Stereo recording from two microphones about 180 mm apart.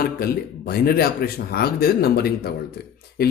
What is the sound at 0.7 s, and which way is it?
Speech, 60° left (ahead or behind).